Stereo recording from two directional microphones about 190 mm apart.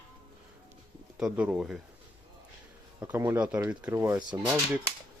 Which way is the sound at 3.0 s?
15° right (ahead or behind).